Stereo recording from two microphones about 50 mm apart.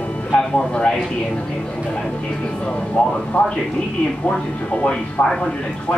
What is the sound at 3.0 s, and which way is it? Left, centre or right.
Speech, left.